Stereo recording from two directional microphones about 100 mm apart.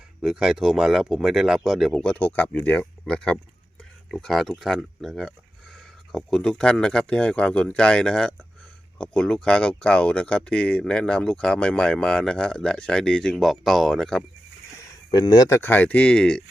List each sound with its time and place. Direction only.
0.2 s speech: 5° right (ahead or behind)
15.1 s speech: 40° left (ahead or behind); by 16.4 s 10° left (ahead or behind)